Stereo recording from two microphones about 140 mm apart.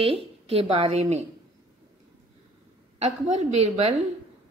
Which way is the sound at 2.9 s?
55° right (ahead or behind).